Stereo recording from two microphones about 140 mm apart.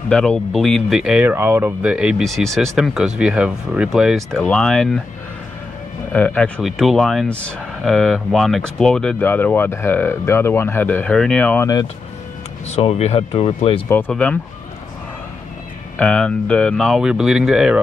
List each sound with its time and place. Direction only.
0.1 s speech: 5° left (ahead or behind)
6.1 s speech: 10° left (ahead or behind)
12.6 s speech: 50° left (ahead or behind)
13.8 s speech: 15° left (ahead or behind)
16.0 s speech: 5° left (ahead or behind)